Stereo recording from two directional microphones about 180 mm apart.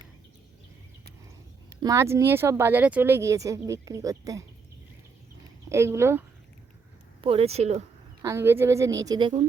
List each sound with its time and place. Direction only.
1.8 s speech: 15° right (ahead or behind)
5.6 s speech: 15° right (ahead or behind)
7.2 s speech: 30° right (ahead or behind)
8.2 s speech: 15° right (ahead or behind)